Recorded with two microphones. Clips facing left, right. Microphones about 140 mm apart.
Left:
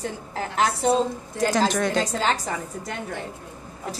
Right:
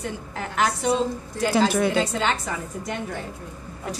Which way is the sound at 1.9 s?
35° left (ahead or behind).